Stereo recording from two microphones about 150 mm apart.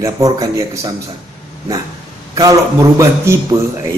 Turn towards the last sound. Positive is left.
turn(degrees=-20)  # may be behind; listen again after turning